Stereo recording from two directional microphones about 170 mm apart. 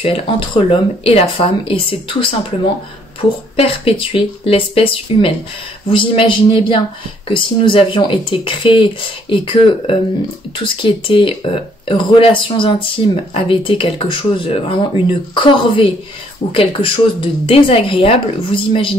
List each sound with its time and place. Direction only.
0.0 s speech: 35° left (ahead or behind)
3.5 s speech: 35° left (ahead or behind)